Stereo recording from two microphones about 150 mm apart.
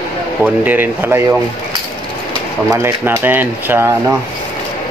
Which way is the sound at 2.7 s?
15° right (ahead or behind).